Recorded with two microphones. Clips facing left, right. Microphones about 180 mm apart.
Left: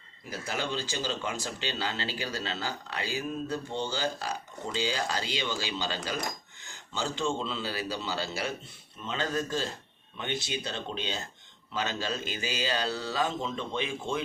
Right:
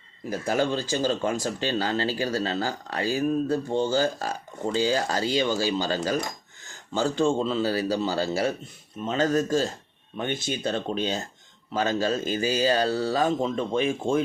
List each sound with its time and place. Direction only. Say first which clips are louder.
0.3 s speech: right 9 dB; 50° right (ahead or behind)